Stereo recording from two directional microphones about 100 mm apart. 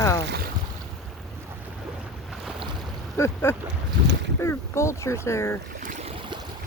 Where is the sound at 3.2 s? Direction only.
25° left (ahead or behind).